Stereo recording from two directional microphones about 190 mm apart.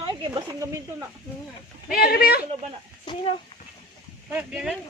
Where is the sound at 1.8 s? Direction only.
55° left (ahead or behind).